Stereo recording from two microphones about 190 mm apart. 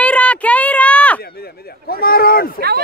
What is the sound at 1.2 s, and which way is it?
Speech, 55° left (ahead or behind).